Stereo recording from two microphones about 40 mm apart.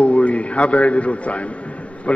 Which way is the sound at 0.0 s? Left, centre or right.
Left.